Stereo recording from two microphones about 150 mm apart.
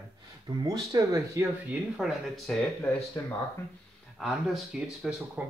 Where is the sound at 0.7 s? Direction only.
25° right (ahead or behind).